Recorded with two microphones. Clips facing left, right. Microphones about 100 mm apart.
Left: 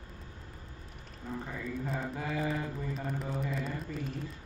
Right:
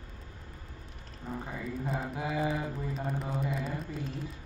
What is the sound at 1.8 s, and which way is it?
Mantra, 5° right (ahead or behind).